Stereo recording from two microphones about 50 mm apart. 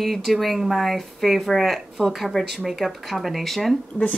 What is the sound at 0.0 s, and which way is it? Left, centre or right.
A woman's voice, centre.